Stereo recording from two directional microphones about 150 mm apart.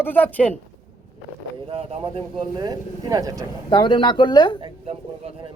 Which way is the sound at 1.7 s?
40° right (ahead or behind).